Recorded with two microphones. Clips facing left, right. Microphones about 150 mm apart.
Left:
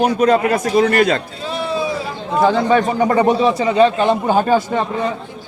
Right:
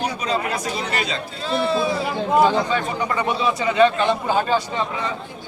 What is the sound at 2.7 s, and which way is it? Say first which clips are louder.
A man's voice: left 9 dB; 45° left (ahead or behind).